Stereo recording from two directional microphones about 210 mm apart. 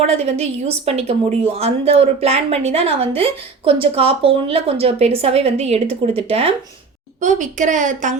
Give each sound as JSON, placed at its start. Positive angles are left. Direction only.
{"t": 0.0, "sound": "a woman's voice", "side_deg": -30}